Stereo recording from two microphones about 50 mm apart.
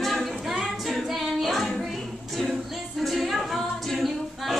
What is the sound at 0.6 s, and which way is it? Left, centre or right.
Female singing, centre.